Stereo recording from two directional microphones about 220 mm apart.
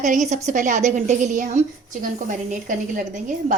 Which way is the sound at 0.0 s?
35° right (ahead or behind).